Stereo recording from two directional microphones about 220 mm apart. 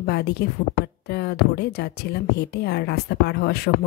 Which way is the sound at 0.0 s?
50° left (ahead or behind).